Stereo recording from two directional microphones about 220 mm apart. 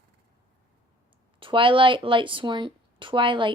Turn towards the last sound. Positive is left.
turn(degrees=-20)  # may be behind; listen again after turning